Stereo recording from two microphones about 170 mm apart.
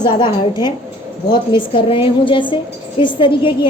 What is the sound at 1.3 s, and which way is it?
A woman's voice, 30° left (ahead or behind).